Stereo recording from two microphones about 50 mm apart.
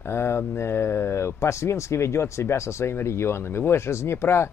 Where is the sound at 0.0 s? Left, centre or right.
Left.